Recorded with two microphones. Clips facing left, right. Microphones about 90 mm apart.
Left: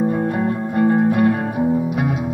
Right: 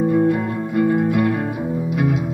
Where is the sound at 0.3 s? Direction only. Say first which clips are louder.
Even; 35° left (ahead or behind).